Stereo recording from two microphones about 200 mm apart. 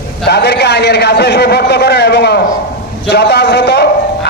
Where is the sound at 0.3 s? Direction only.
55° left (ahead or behind).